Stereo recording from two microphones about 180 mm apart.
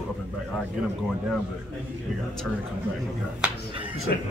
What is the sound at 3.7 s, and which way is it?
Speech, 30° right (ahead or behind).